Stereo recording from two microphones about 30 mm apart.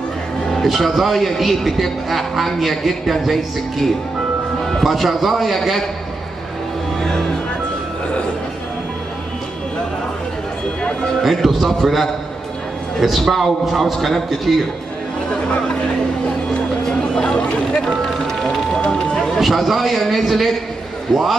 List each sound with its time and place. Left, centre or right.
0.5 s a man's voice: centre
4.8 s a man's voice: centre
11.2 s a man's voice: centre
17.1 s vehicle: left
17.8 s music: centre
18.9 s a sound: centre
19.3 s a man's voice: centre